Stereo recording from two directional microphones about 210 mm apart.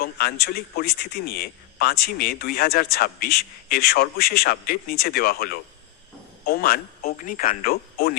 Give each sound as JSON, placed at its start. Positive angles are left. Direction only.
{"t": 0.0, "sound": "a man's voice", "side_deg": 45}